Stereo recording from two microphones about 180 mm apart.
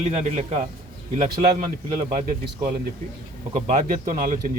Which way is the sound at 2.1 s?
50° right (ahead or behind).